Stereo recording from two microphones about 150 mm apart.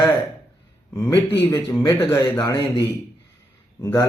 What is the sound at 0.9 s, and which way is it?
A man's voice, 20° left (ahead or behind).